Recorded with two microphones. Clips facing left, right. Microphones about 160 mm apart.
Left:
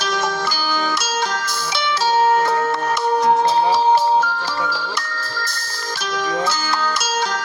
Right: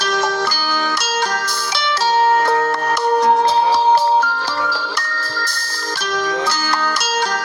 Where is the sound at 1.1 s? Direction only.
70° right (ahead or behind).